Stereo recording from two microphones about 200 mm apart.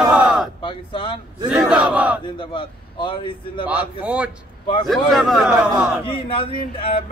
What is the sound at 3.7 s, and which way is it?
Speech, 5° right (ahead or behind).